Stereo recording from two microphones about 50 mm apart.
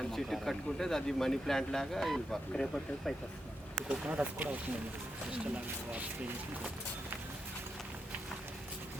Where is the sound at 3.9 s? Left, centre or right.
Right.